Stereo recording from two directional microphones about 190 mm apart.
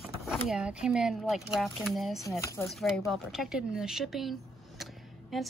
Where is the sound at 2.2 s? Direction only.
15° left (ahead or behind).